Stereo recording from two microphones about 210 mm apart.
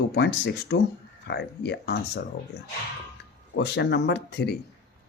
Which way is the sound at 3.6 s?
55° left (ahead or behind).